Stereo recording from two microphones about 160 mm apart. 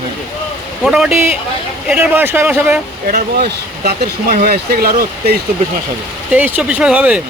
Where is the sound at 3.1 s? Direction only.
70° right (ahead or behind).